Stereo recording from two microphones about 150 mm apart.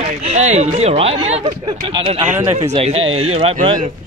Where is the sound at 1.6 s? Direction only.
35° right (ahead or behind).